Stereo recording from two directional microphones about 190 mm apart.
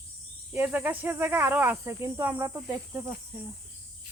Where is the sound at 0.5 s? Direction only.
10° right (ahead or behind).